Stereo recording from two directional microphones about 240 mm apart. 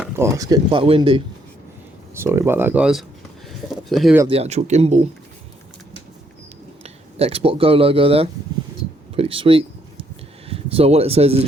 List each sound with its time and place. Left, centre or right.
0.0 s speech: centre
2.1 s speech: centre
4.3 s speech: right
6.8 s speech: right
9.1 s a sound: right
10.5 s speech: right